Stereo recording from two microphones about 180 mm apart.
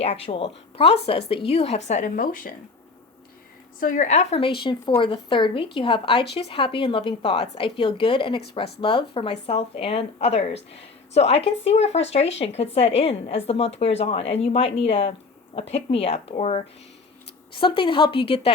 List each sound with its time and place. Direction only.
0.3 s speech: 30° left (ahead or behind); by 2.5 s 50° left (ahead or behind)
3.8 s a woman's voice: 45° left (ahead or behind); by 18.5 s 30° left (ahead or behind)